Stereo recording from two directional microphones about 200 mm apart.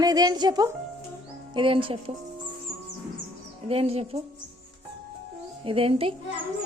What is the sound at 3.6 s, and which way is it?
Speech, 30° right (ahead or behind).